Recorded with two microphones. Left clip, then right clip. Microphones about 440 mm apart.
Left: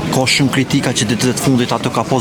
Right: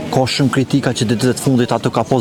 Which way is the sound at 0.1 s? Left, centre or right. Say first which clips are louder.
Left 1 dB; right.